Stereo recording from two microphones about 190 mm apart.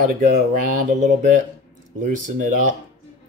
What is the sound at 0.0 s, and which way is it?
Speech, 45° right (ahead or behind).